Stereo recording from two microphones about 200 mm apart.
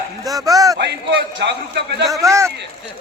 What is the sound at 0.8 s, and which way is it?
A man's voice, 55° right (ahead or behind).